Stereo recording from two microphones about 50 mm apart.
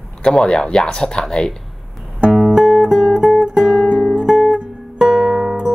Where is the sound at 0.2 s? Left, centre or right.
Centre.